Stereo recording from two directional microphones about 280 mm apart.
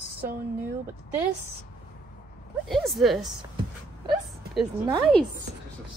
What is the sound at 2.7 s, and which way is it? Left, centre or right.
Speech, centre.